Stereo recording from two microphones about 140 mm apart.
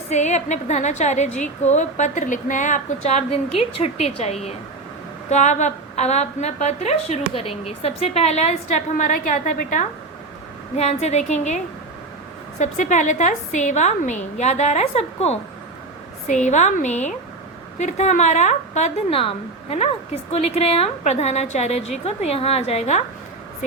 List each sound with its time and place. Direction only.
0.1 s a woman's voice: 55° left (ahead or behind)
10.8 s a woman's voice: 50° left (ahead or behind)
20.3 s a woman's voice: 50° left (ahead or behind)